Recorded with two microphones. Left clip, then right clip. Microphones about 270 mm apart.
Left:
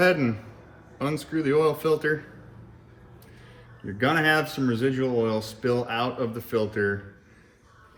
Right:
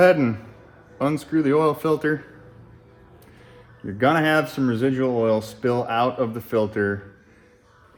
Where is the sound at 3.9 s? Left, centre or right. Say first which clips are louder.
Right 3 dB; right.